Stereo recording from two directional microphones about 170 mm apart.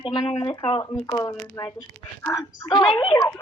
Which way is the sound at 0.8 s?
20° left (ahead or behind).